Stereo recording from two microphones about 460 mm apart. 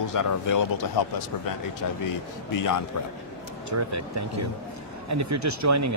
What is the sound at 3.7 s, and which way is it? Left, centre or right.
Speech, right.